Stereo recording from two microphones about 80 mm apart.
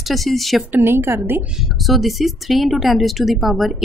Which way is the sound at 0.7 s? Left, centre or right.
Right.